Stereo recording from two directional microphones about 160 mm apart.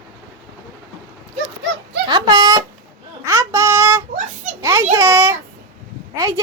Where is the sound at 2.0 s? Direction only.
30° right (ahead or behind).